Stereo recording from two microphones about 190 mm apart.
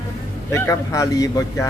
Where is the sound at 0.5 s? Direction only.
15° left (ahead or behind).